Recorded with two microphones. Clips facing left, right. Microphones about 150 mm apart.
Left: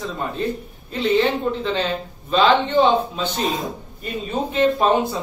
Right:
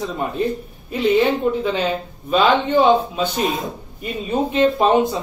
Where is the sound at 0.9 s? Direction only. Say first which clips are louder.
Right 2 dB; 15° right (ahead or behind).